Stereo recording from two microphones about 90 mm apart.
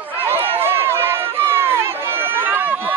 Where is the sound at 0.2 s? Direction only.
25° right (ahead or behind).